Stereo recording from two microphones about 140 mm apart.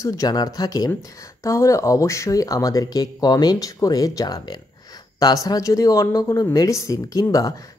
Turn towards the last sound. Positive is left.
turn(degrees=25)  # may be behind; listen again after turning